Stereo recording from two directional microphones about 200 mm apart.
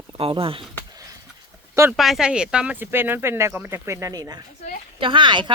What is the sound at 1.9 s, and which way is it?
Speech, centre (ahead or behind).